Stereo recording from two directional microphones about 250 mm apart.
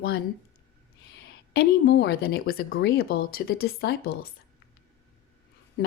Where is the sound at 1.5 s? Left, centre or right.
Left.